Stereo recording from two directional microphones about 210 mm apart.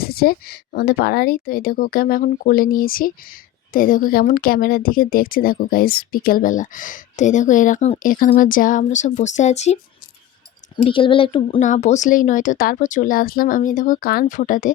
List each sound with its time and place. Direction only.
0.0 s speech: 45° left (ahead or behind)
10.8 s speech: 25° left (ahead or behind)
11.6 s speech: 35° left (ahead or behind)